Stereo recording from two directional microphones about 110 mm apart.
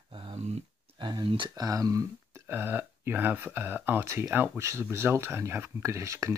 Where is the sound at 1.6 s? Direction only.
35° right (ahead or behind).